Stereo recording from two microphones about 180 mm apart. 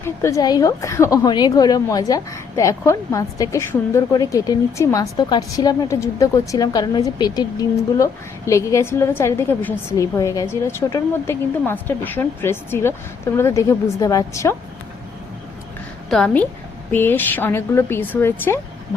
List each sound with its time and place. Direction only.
0.0 s a woman's voice: 15° left (ahead or behind)
16.0 s a woman's voice: 5° left (ahead or behind)